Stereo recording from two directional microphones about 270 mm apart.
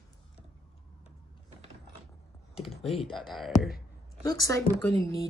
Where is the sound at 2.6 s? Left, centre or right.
Centre.